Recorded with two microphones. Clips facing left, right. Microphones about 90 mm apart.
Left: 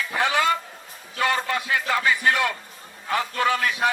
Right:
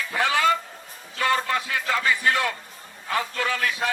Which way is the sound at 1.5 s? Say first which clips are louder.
Left 1 dB; 20° left (ahead or behind).